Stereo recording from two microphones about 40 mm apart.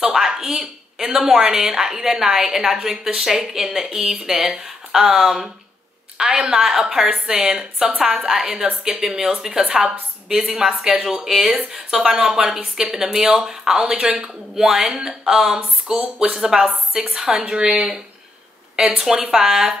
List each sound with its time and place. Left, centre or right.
0.0 s a sound: centre
1.2 s a woman's voice: centre
8.3 s a woman's voice: centre
17.4 s a woman's voice: right